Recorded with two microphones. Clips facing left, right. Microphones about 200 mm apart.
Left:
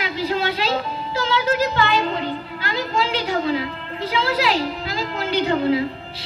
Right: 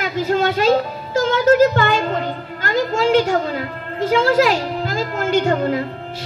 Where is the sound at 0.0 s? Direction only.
50° right (ahead or behind).